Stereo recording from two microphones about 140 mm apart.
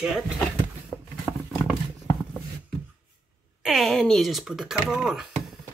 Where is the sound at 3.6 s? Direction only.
Centre (ahead or behind).